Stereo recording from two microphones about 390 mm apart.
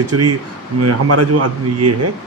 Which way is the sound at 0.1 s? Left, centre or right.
Right.